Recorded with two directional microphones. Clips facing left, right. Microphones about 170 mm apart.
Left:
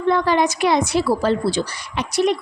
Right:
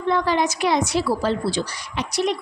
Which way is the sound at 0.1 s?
60° left (ahead or behind).